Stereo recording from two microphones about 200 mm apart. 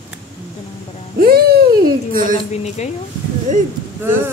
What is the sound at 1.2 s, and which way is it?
Babbling, 50° right (ahead or behind).